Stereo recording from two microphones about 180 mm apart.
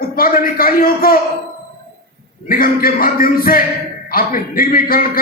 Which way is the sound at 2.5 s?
55° left (ahead or behind).